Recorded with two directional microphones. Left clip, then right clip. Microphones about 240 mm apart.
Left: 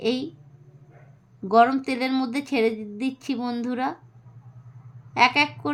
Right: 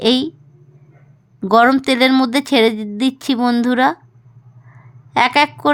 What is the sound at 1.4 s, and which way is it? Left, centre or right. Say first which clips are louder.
Speech: right 6 dB; right.